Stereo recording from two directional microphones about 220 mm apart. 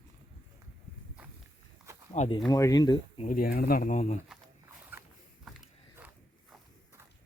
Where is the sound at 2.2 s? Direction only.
30° left (ahead or behind).